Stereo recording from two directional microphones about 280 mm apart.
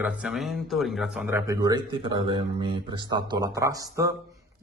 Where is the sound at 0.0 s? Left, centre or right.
Centre.